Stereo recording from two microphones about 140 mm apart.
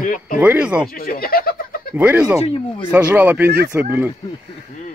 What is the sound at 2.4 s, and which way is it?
Speech, 40° left (ahead or behind).